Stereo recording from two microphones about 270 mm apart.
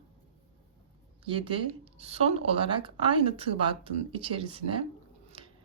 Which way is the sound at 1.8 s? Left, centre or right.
Right.